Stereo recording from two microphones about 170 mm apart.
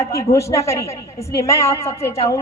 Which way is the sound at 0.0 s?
20° left (ahead or behind).